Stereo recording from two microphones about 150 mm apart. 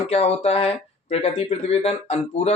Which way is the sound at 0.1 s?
45° left (ahead or behind).